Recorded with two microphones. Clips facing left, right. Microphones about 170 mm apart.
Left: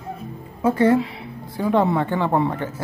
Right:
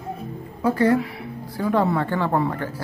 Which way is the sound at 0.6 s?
25° left (ahead or behind).